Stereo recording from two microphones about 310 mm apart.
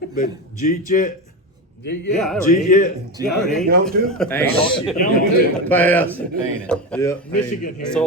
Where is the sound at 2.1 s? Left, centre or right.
Centre.